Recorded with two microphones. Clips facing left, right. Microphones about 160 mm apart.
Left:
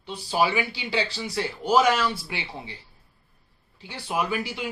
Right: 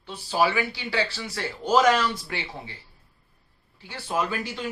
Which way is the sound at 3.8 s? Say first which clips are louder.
Even; 15° left (ahead or behind).